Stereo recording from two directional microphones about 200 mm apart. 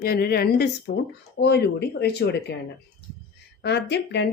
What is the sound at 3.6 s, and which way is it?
Speech, 55° left (ahead or behind).